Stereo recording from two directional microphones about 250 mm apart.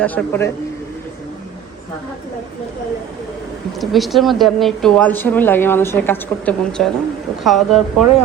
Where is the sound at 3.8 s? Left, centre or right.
Centre.